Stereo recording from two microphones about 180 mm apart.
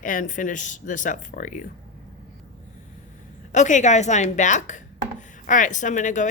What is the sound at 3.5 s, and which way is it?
A woman's voice, 45° left (ahead or behind).